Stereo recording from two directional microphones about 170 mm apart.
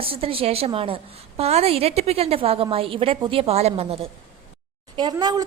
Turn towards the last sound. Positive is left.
turn(degrees=-25)  # may be behind; listen again after turning